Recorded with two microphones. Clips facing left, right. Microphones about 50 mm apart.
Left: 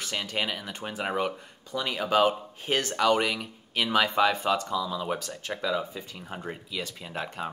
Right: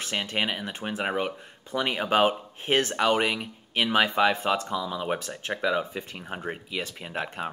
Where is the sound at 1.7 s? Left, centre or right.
Right.